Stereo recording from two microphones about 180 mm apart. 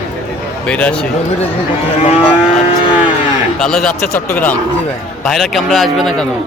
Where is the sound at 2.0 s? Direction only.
30° left (ahead or behind).